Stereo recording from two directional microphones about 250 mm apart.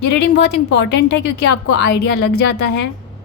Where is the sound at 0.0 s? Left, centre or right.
Left.